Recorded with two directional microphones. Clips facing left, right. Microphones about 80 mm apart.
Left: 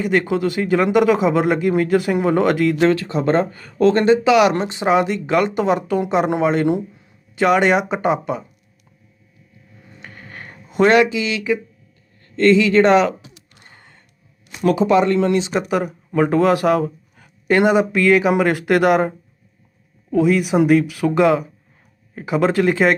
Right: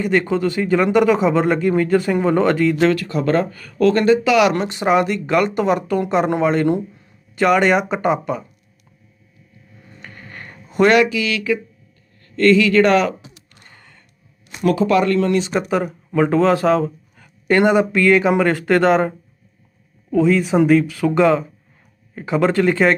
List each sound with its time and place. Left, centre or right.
0.0 s speech: left
9.9 s a sound: left
12.2 s speech: left
13.5 s gasp: left
14.6 s speech: centre
20.1 s speech: centre